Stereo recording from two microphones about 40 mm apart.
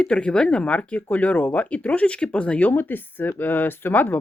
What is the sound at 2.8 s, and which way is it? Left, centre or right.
Speech, left.